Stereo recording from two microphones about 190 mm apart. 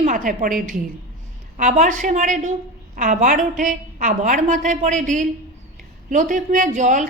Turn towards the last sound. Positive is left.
turn(degrees=-40)  # may be behind; listen again after turning